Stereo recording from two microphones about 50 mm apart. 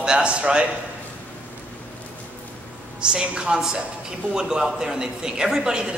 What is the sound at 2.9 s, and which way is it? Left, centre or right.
A woman's voice, centre.